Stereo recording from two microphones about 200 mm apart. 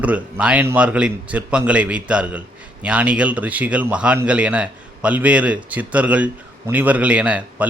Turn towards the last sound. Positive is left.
turn(degrees=-5)  # may be behind; listen again after turning